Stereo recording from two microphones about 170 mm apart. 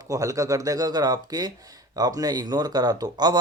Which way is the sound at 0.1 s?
20° right (ahead or behind).